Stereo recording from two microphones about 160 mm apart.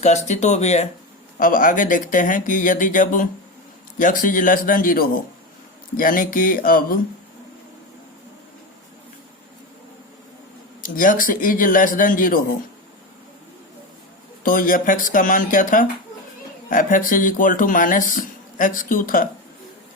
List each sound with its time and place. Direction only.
0.0 s speech: 45° left (ahead or behind)
1.4 s speech: 60° left (ahead or behind)
10.8 s speech: 60° left (ahead or behind)
14.4 s speech: 60° left (ahead or behind)